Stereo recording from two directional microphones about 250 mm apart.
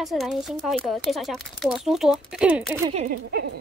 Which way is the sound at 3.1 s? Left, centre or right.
Right.